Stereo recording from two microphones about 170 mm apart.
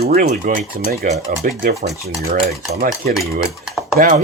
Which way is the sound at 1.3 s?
55° right (ahead or behind).